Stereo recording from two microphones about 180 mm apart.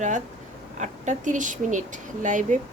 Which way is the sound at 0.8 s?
45° right (ahead or behind).